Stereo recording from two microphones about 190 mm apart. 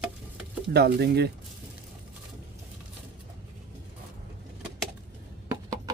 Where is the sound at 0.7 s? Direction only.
60° right (ahead or behind).